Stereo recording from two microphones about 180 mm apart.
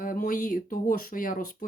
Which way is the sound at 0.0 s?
50° left (ahead or behind).